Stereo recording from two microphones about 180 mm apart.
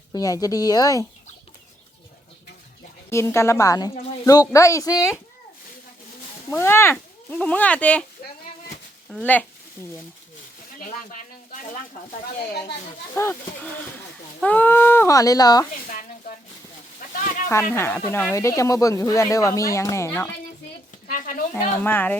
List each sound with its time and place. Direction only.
0.1 s speech: 20° left (ahead or behind)
3.1 s speech: 15° left (ahead or behind)
6.5 s speech: 15° left (ahead or behind)
9.0 s speech: 5° left (ahead or behind)
10.8 s a sound: 45° left (ahead or behind)
13.1 s speech: 15° left (ahead or behind)
17.5 s speech: 10° left (ahead or behind)
21.1 s speech: 50° left (ahead or behind)
21.5 s speech: 10° left (ahead or behind)